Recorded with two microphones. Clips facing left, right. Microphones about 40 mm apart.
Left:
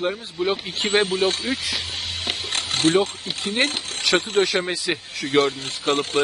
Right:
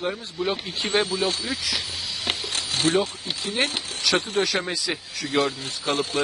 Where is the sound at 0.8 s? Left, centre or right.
Left.